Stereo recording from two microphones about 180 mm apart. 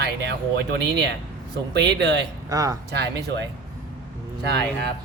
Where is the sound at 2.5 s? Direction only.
20° right (ahead or behind).